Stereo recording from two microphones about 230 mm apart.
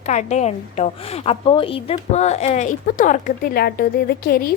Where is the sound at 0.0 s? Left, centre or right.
Left.